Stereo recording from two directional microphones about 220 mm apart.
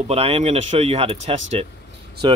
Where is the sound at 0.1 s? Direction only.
25° right (ahead or behind).